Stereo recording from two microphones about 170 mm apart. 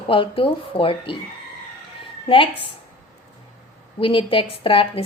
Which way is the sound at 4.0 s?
30° left (ahead or behind).